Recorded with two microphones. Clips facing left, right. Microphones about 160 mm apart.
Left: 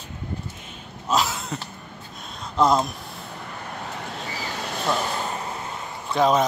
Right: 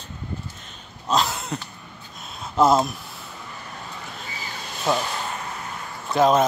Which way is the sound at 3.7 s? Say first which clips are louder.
Left 6 dB; 70° left (ahead or behind).